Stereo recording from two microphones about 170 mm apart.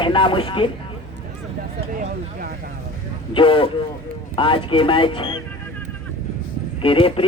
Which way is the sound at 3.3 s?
30° left (ahead or behind).